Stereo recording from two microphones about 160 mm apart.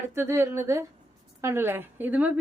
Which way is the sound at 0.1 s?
15° right (ahead or behind).